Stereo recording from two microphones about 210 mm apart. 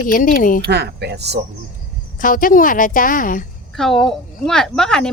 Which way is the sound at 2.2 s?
40° left (ahead or behind).